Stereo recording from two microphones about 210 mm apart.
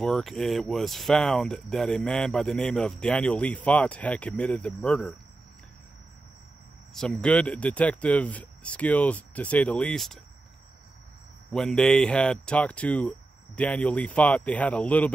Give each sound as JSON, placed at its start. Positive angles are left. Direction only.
{"t": 0.0, "sound": "speech", "side_deg": 0}
{"t": 6.9, "sound": "speech", "side_deg": 5}
{"t": 11.5, "sound": "speech", "side_deg": 5}